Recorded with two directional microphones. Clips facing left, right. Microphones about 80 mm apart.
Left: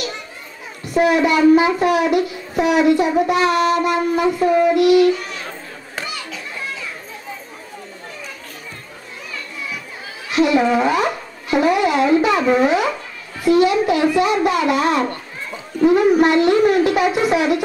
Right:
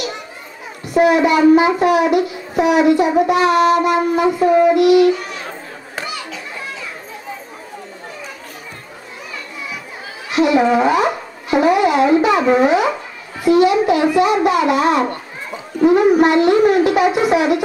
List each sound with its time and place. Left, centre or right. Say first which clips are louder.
0.9 s a child's voice: right 2 dB; centre
3.3 s child singing: right 3 dB; centre
6.3 s children playing: even; right
9.3 s children playing: even; centre
10.3 s a sound: right 2 dB; centre